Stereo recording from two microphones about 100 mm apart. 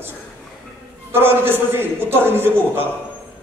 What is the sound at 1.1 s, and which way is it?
A man's voice, 25° right (ahead or behind).